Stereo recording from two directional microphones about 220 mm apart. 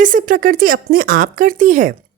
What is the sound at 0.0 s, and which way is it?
A woman's voice, 35° right (ahead or behind).